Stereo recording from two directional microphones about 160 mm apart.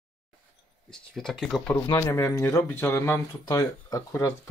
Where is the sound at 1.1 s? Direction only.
Centre (ahead or behind).